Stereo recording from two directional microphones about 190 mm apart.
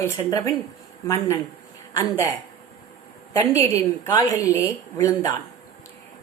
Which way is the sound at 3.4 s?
15° left (ahead or behind).